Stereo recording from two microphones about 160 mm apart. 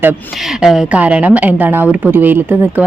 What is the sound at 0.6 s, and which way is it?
Speech, 5° right (ahead or behind).